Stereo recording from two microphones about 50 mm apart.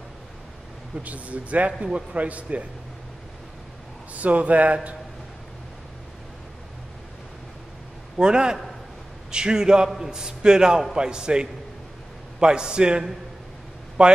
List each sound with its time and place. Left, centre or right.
0.9 s speech: right
4.1 s speech: right
8.2 s a man's voice: centre